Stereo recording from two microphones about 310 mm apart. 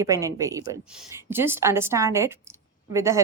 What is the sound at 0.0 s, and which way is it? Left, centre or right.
A woman's voice, centre.